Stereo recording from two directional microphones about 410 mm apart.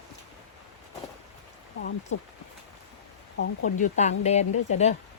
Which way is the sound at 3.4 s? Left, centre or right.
Centre.